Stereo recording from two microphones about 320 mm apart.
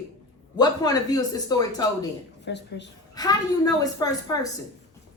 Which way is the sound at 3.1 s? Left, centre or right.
Centre.